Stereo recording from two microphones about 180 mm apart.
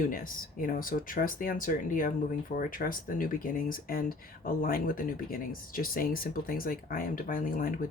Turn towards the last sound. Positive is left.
turn(degrees=50)  # may be behind; listen again after turning